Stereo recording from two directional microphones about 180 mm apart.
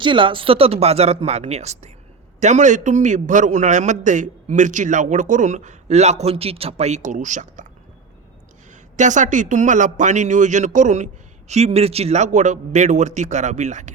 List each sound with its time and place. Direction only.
0.0 s a man's voice: 25° right (ahead or behind); by 7.7 s 45° right (ahead or behind)
8.7 s speech: 45° right (ahead or behind)